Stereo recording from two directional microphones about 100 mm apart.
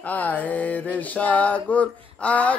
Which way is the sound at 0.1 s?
15° left (ahead or behind).